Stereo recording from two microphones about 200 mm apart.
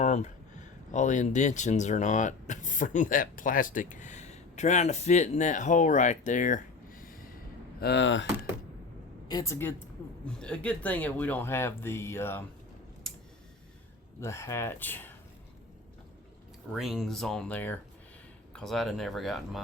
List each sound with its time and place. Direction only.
0.0 s speech: 35° left (ahead or behind)
7.8 s speech: 60° left (ahead or behind)
9.2 s speech: 15° left (ahead or behind)
14.2 s speech: 15° left (ahead or behind)
16.7 s speech: centre (ahead or behind)